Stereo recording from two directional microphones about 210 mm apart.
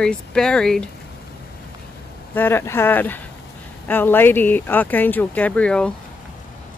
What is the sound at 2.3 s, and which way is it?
Speech, 10° left (ahead or behind).